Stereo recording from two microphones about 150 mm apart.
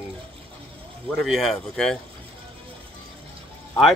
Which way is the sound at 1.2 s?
Centre (ahead or behind).